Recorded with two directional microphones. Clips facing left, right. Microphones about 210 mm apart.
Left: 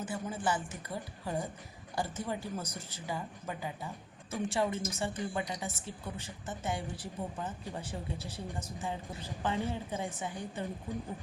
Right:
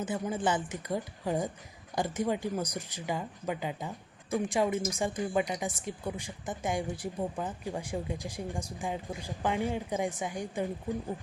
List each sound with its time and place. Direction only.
0.0 s a woman's voice: 20° right (ahead or behind)